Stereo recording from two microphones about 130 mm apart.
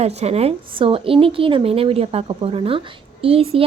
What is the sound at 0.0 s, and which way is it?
A woman's voice, 55° right (ahead or behind).